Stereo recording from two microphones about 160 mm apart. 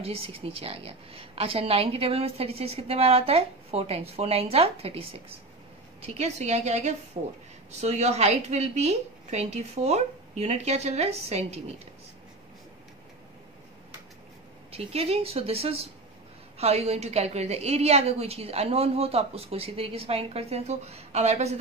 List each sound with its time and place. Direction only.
0.0 s a woman's voice: 35° right (ahead or behind)
14.7 s a woman's voice: 40° right (ahead or behind)